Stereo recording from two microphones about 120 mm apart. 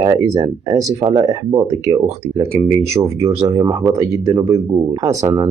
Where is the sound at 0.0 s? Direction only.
30° right (ahead or behind).